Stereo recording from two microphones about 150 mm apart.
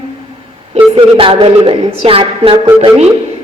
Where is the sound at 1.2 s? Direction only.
35° right (ahead or behind).